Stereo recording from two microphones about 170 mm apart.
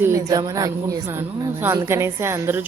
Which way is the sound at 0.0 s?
20° right (ahead or behind).